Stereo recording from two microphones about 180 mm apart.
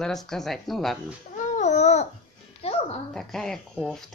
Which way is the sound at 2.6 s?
35° left (ahead or behind).